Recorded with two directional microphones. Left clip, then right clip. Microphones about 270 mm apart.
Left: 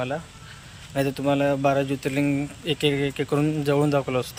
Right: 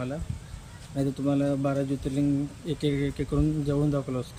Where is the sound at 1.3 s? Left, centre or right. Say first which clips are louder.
Left 7 dB; centre.